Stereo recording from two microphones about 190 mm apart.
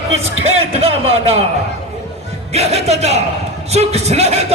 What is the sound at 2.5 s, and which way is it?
A man's voice, 35° right (ahead or behind).